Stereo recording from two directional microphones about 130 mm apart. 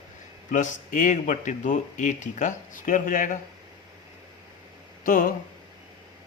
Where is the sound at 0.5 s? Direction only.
80° left.